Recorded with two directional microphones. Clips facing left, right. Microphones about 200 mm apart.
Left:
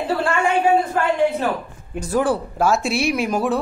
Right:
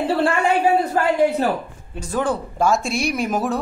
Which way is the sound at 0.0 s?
30° right (ahead or behind).